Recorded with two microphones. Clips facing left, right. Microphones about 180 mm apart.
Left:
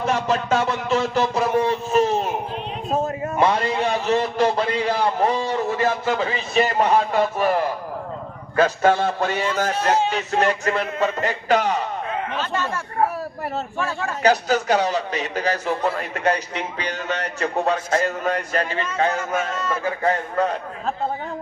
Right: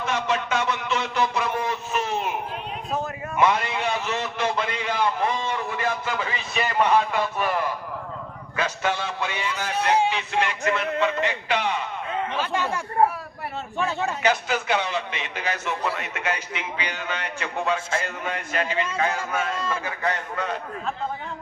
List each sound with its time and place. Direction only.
0.0 s a man's voice: 40° left (ahead or behind)
3.3 s a man's voice: 35° left (ahead or behind)
12.4 s speech: 15° right (ahead or behind)
14.2 s a man's voice: 40° left (ahead or behind)